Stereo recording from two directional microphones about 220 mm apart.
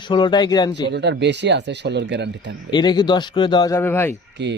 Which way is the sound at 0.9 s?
50° right (ahead or behind).